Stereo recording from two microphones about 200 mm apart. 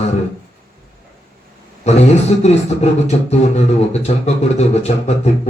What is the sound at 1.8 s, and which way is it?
Speech, 35° left (ahead or behind).